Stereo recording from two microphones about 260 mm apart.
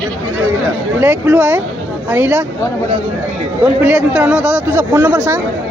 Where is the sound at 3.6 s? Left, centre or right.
Centre.